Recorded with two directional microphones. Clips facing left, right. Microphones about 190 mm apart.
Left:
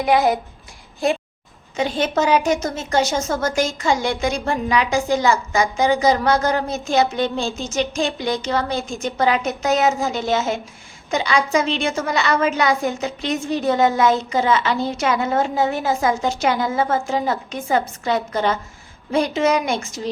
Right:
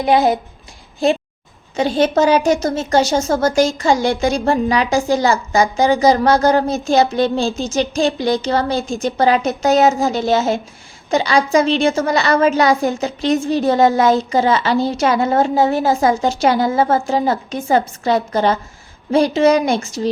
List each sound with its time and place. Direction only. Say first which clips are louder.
0.0 s a child's voice: right 3 dB; 30° right (ahead or behind)
1.7 s speech: right 5 dB; 35° right (ahead or behind)